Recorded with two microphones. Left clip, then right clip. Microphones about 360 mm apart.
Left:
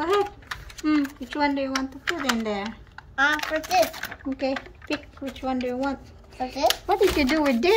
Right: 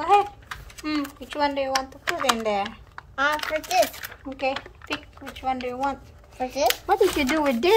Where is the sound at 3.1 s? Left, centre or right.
Centre.